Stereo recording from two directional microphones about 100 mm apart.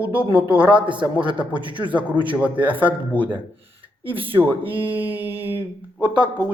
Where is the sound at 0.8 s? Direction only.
55° right (ahead or behind).